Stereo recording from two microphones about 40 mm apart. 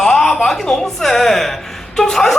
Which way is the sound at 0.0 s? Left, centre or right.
Centre.